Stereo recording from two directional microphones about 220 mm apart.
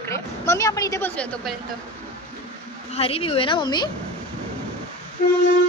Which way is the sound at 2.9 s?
25° left (ahead or behind).